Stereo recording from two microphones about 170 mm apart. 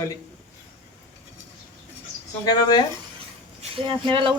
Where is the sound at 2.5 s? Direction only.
20° left (ahead or behind).